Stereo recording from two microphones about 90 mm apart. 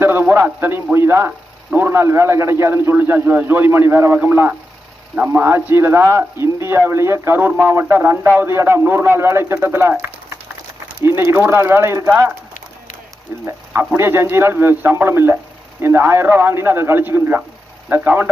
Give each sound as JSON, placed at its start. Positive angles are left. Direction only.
{"t": 0.0, "sound": "speech", "side_deg": -25}
{"t": 11.0, "sound": "speech", "side_deg": -30}
{"t": 13.4, "sound": "speech", "side_deg": -25}